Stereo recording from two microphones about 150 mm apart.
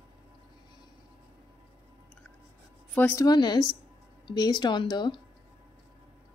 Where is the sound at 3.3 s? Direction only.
30° left (ahead or behind).